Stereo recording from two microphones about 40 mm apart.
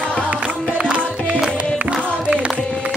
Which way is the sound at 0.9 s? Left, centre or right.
Right.